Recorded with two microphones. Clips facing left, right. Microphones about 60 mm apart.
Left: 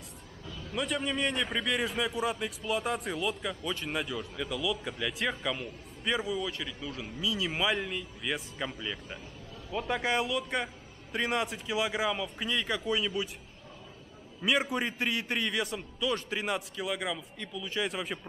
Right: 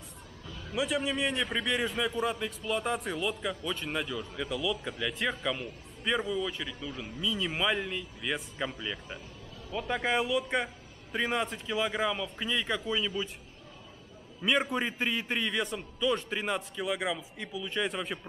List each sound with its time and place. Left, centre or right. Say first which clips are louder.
0.7 s a man's voice: right 1 dB; centre
14.4 s a man's voice: even; centre